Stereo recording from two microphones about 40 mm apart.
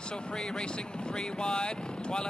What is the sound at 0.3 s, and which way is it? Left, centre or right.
Speech, left.